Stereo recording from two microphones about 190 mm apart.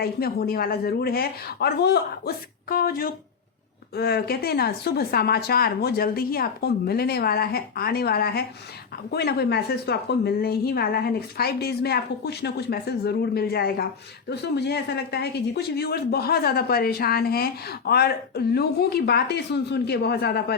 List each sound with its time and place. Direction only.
0.0 s a woman's voice: 55° left (ahead or behind)